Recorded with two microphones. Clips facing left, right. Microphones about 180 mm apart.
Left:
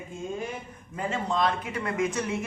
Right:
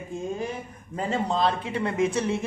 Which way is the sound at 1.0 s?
30° right (ahead or behind).